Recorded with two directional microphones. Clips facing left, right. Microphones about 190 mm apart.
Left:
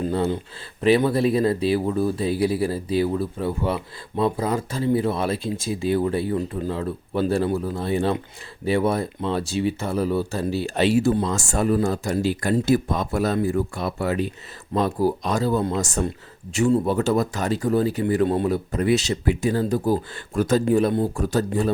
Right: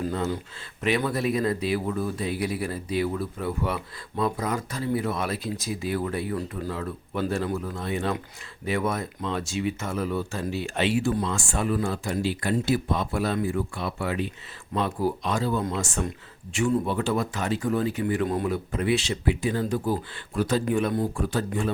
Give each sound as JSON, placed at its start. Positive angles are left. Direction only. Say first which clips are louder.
{"t": 0.0, "sound": "a sound", "louder": "left 5 dB", "side_deg": 30}
{"t": 0.8, "sound": "speech", "louder": "left 7 dB", "side_deg": 30}
{"t": 20.7, "sound": "speech", "louder": "left 5 dB", "side_deg": 35}